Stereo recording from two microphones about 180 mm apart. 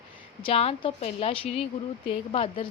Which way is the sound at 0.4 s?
35° left (ahead or behind).